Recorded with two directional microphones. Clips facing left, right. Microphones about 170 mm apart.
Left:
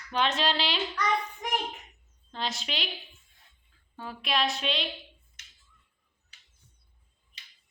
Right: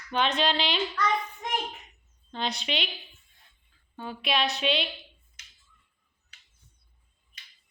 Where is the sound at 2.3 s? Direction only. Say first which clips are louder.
Right 3 dB; centre (ahead or behind).